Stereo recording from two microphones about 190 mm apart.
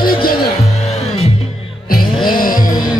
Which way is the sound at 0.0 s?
50° left (ahead or behind).